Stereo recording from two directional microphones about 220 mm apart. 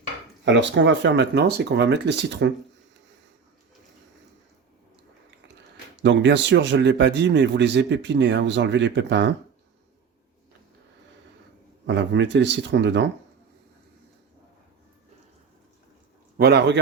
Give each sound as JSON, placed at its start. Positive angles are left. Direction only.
{"t": 0.4, "sound": "speech", "side_deg": -55}
{"t": 6.0, "sound": "speech", "side_deg": -55}
{"t": 11.9, "sound": "speech", "side_deg": -55}
{"t": 16.4, "sound": "speech", "side_deg": -45}